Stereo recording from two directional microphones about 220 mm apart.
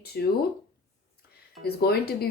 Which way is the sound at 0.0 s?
45° left (ahead or behind).